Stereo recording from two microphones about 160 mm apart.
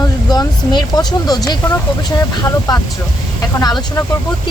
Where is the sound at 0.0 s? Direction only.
25° left (ahead or behind).